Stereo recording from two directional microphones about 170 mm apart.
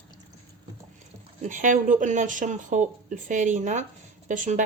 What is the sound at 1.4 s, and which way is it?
Speech, 50° right (ahead or behind).